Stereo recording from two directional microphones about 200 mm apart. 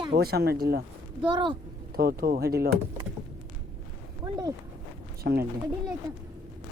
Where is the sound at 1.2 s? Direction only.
25° right (ahead or behind).